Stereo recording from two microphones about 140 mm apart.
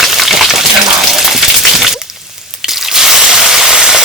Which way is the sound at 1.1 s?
Centre (ahead or behind).